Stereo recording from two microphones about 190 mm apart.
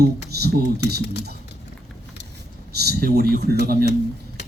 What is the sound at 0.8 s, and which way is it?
Speech, 60° left (ahead or behind).